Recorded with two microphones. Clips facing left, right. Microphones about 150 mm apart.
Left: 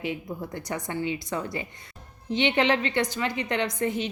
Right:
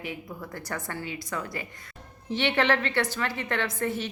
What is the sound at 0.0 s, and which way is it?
A woman's voice, 25° left (ahead or behind).